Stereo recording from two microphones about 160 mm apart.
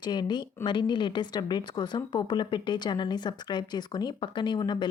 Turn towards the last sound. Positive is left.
turn(degrees=30)  # may be behind; listen again after turning